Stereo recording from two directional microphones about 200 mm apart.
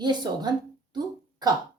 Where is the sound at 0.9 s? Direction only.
20° right (ahead or behind).